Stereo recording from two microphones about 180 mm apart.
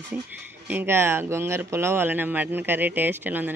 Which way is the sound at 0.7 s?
10° right (ahead or behind).